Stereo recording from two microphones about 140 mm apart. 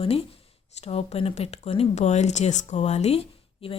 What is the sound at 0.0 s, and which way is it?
Speech, 45° left (ahead or behind).